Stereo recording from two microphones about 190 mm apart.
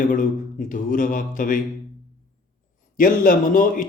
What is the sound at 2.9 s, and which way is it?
Speech, 45° left (ahead or behind).